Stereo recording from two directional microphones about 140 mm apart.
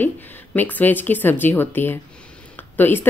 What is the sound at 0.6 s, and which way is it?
A woman's voice, 10° left (ahead or behind).